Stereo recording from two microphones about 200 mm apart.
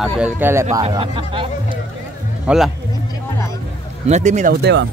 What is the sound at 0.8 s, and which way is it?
Speech, 30° right (ahead or behind).